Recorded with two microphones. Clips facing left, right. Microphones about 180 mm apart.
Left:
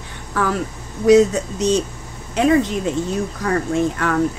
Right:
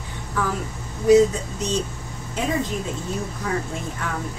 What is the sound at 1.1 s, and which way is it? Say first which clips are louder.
Speech: left 3 dB; 85° left.